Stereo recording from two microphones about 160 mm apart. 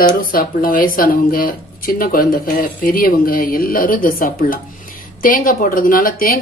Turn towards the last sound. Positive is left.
turn(degrees=65)  # may be behind; listen again after turning